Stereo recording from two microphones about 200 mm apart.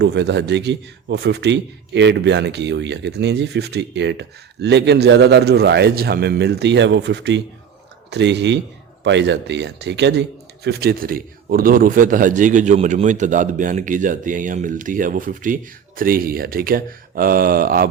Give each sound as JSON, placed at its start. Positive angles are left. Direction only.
{"t": 0.0, "sound": "a man's voice", "side_deg": -60}